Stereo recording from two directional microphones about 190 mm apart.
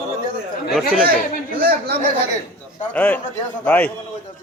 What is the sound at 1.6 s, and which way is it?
Speech, 55° right (ahead or behind).